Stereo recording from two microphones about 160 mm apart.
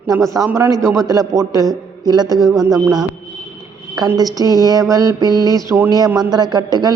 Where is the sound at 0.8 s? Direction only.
5° left (ahead or behind).